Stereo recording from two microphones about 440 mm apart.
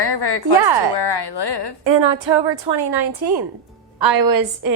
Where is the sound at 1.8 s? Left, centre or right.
Right.